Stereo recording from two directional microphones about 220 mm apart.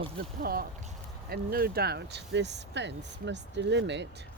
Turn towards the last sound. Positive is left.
turn(degrees=-55)  # may be behind; listen again after turning